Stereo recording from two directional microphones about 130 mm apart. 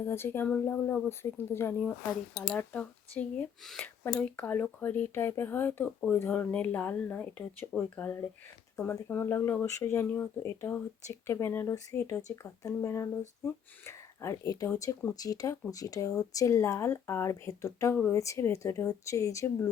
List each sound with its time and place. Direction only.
0.0 s speech: 20° left (ahead or behind)